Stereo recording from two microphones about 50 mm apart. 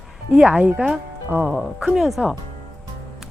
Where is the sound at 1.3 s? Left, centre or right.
Right.